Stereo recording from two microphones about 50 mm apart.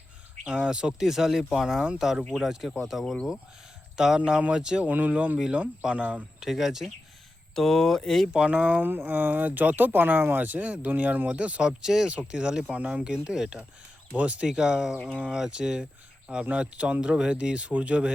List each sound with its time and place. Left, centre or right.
0.4 s speech: centre
4.9 s speech: right
6.4 s speech: centre
7.5 s speech: centre
8.3 s speech: right
8.9 s speech: right
11.8 s speech: centre
12.0 s speech: right
14.1 s speech: right
14.4 s speech: centre